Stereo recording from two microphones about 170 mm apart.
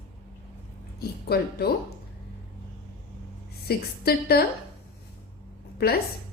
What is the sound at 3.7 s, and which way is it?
Speech, 65° left (ahead or behind).